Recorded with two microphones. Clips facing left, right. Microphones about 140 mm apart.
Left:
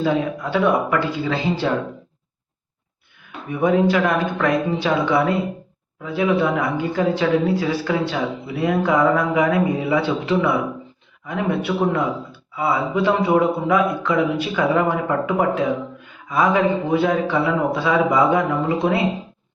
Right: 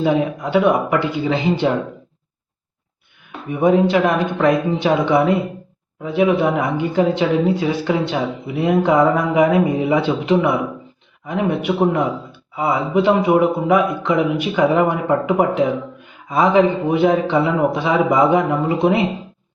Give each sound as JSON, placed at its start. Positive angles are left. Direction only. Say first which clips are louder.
{"t": 0.0, "sound": "a woman's voice", "louder": "right 3 dB", "side_deg": -15}
{"t": 3.5, "sound": "a woman's voice", "louder": "right 3 dB", "side_deg": -20}